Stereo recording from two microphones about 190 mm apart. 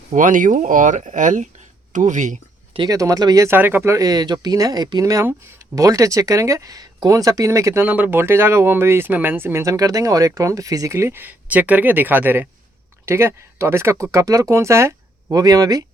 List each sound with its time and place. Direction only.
0.1 s speech: 45° right (ahead or behind)
2.7 s speech: 20° right (ahead or behind)